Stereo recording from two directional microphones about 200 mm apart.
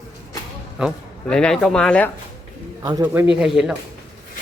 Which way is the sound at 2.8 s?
20° right (ahead or behind).